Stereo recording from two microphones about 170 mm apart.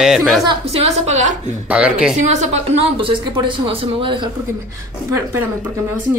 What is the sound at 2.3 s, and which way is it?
A woman's voice, 40° right (ahead or behind).